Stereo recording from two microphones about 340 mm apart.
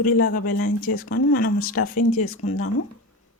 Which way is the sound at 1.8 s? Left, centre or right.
Left.